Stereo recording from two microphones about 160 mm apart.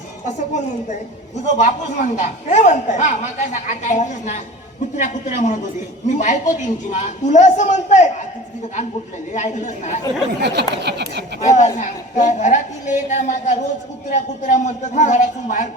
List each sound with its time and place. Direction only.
0.3 s a man's voice: 50° left (ahead or behind)
9.3 s a man's voice: 50° left (ahead or behind)
10.4 s speech: 90° right
11.4 s a man's voice: 50° left (ahead or behind)